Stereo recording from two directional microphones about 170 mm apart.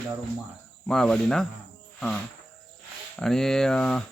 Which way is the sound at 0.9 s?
5° left (ahead or behind).